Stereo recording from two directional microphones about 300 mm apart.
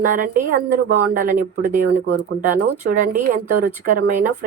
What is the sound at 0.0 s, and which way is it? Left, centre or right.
Speech, right.